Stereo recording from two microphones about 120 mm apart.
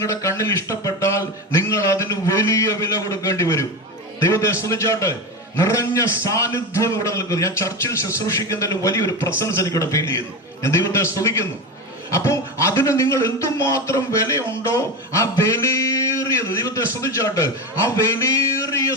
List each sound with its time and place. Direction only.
0.0 s a man's voice: 25° left (ahead or behind)